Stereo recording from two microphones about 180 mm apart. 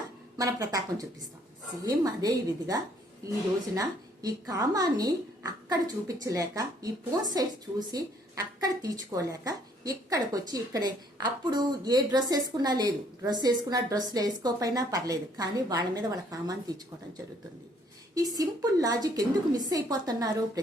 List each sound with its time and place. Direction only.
0.3 s a woman's voice: 20° right (ahead or behind)
18.1 s a woman's voice: 20° right (ahead or behind)